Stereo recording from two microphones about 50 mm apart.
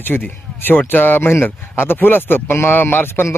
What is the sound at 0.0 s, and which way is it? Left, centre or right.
Speech, left.